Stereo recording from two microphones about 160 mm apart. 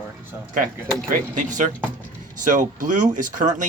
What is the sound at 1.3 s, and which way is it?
Speech, 50° right (ahead or behind).